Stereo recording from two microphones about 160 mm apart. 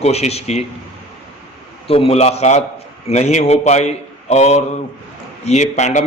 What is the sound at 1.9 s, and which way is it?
A man's voice, 40° left (ahead or behind).